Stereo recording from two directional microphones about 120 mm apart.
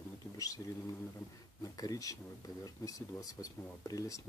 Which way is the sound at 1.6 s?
30° left (ahead or behind).